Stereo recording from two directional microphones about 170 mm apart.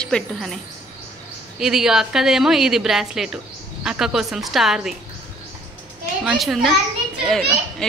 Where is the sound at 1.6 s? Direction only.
5° right (ahead or behind).